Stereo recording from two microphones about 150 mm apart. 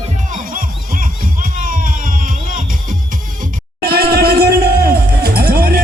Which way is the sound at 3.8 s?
90° right.